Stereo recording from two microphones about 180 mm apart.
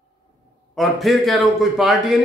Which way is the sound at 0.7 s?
Centre (ahead or behind).